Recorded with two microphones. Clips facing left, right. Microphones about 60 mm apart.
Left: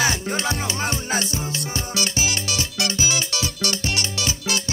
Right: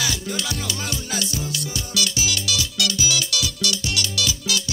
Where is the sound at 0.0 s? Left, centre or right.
Left.